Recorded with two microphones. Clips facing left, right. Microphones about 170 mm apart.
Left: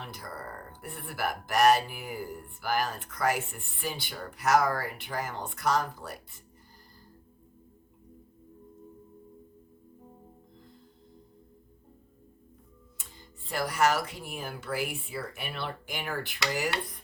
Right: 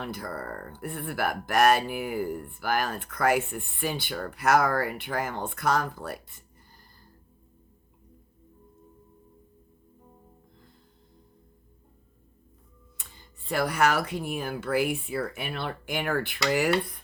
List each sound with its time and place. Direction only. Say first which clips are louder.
0.0 s speech: right 6 dB; 60° right (ahead or behind)
13.0 s speech: left 1 dB; 60° right (ahead or behind)